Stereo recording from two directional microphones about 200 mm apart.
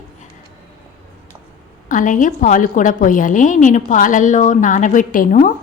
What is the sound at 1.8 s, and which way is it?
A woman's voice, 40° left (ahead or behind).